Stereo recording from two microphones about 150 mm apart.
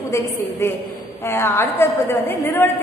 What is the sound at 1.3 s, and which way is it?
A woman's voice, 15° left (ahead or behind).